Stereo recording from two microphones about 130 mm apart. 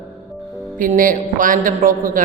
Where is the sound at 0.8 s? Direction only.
90° right.